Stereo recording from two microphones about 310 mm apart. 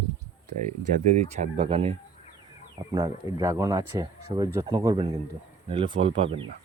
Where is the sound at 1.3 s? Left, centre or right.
Centre.